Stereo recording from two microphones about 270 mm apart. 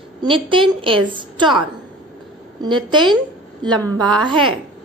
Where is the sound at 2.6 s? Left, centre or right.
Centre.